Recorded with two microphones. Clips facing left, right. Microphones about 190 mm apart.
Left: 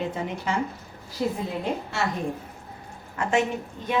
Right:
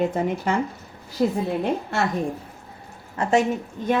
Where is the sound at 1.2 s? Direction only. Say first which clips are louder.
Right 5 dB; 55° right (ahead or behind).